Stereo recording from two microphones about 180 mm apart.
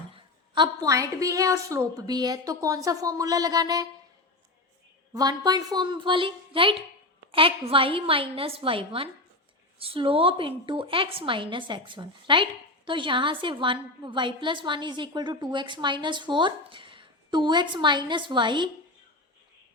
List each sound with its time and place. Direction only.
0.1 s a woman's voice: 25° right (ahead or behind)
5.1 s a woman's voice: 20° right (ahead or behind)
7.3 s a sound: 30° right (ahead or behind)
7.7 s a woman's voice: 30° right (ahead or behind)